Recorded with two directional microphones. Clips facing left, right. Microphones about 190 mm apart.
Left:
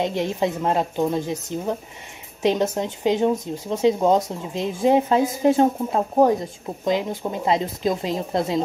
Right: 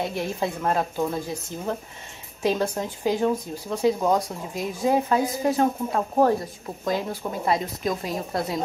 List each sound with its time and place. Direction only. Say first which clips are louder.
0.0 s speech: left 4 dB; 20° left (ahead or behind)